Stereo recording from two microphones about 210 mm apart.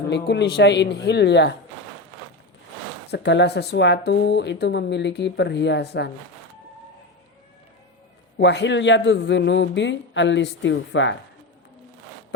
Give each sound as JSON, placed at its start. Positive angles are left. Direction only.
{"t": 0.1, "sound": "speech", "side_deg": 55}
{"t": 3.1, "sound": "speech", "side_deg": 55}
{"t": 8.4, "sound": "speech", "side_deg": 55}